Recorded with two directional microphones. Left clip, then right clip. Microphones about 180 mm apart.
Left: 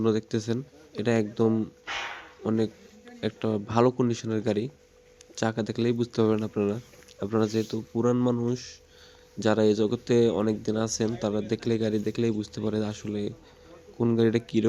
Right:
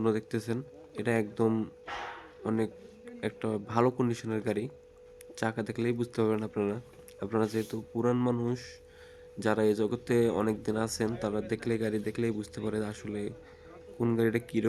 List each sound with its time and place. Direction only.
0.0 s speech: 15° left (ahead or behind)
1.5 s speech: 5° left (ahead or behind)